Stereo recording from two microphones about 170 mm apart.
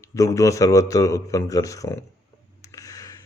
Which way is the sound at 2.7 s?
20° left (ahead or behind).